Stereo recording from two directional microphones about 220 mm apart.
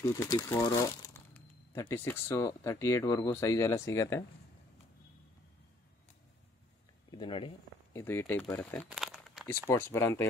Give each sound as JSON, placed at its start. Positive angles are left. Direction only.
{"t": 0.0, "sound": "speech", "side_deg": 15}
{"t": 7.1, "sound": "speech", "side_deg": 20}
{"t": 7.9, "sound": "speech", "side_deg": 10}
{"t": 8.8, "sound": "crumpling", "side_deg": -5}
{"t": 9.5, "sound": "speech", "side_deg": 10}